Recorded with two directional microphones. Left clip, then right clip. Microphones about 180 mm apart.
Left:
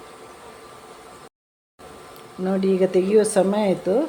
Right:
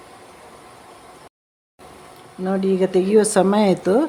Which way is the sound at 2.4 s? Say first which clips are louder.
Right 1 dB; 5° right (ahead or behind).